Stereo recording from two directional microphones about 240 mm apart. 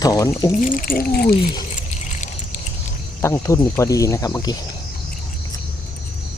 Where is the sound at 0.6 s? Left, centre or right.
Left.